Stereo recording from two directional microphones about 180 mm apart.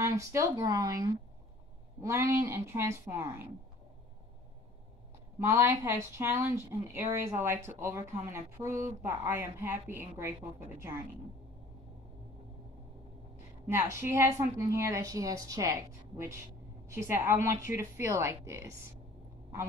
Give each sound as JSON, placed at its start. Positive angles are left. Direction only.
{"t": 0.0, "sound": "speech", "side_deg": -15}
{"t": 5.4, "sound": "speech", "side_deg": -15}
{"t": 13.7, "sound": "speech", "side_deg": -15}